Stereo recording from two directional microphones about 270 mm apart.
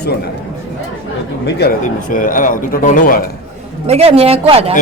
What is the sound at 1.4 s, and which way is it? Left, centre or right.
Speech, left.